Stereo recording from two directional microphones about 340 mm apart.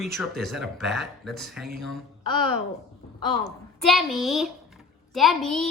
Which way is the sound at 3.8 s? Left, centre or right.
Centre.